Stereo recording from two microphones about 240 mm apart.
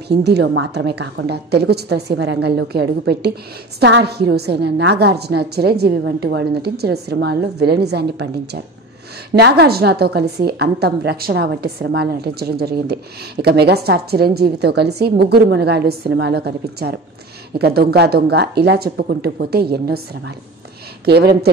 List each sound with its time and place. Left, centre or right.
0.2 s a woman's voice: right
21.0 s a woman's voice: right